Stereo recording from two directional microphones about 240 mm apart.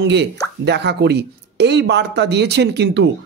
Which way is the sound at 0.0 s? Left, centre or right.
Right.